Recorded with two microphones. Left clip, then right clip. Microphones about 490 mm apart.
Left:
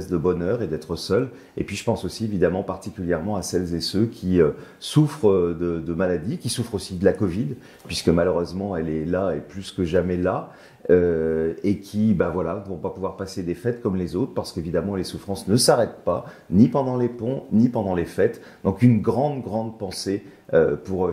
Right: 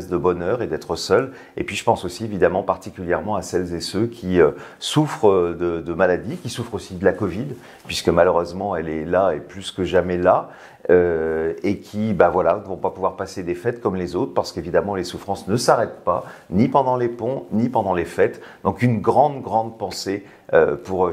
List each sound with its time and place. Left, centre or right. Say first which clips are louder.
0.1 s speech: right 3 dB; right